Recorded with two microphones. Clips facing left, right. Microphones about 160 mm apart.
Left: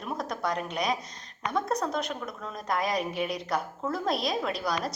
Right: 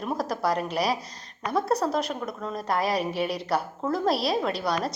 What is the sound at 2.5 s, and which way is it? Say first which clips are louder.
Speech: right 3 dB; 30° right (ahead or behind).